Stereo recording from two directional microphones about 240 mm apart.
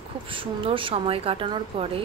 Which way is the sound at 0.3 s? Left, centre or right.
Right.